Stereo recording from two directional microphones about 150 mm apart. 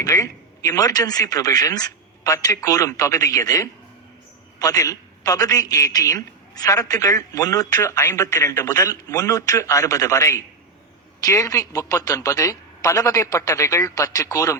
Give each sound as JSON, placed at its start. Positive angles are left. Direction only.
{"t": 0.0, "sound": "a man's voice", "side_deg": 20}